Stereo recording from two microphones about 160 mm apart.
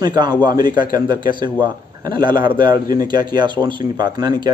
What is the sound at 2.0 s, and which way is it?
Speech, 25° right (ahead or behind).